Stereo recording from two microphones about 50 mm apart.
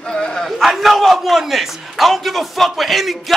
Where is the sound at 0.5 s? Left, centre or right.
Centre.